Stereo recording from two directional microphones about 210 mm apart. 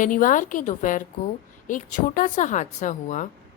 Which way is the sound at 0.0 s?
40° left (ahead or behind).